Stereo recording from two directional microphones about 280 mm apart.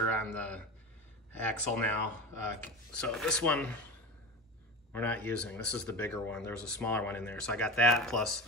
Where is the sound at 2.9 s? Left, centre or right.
Centre.